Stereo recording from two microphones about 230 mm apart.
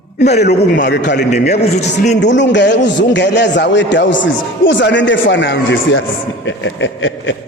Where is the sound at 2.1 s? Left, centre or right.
Left.